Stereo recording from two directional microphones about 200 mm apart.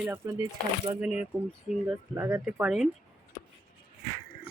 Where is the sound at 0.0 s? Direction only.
10° right (ahead or behind).